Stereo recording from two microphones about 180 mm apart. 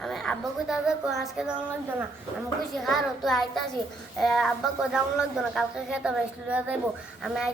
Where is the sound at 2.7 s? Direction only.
Centre (ahead or behind).